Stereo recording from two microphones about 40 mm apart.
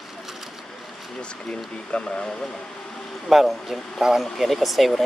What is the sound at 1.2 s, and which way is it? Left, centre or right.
Speech, left.